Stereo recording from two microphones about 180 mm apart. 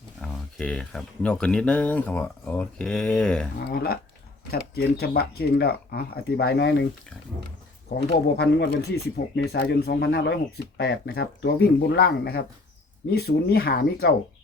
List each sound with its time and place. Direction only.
0.2 s speech: 5° left (ahead or behind)
4.5 s speech: 60° left (ahead or behind)
8.4 s speech: 70° left (ahead or behind)